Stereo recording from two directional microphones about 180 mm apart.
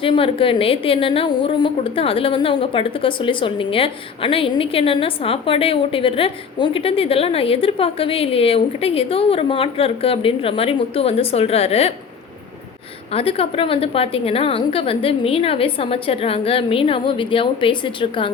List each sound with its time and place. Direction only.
0.0 s a woman's voice: 30° left (ahead or behind)
13.1 s a woman's voice: 30° left (ahead or behind)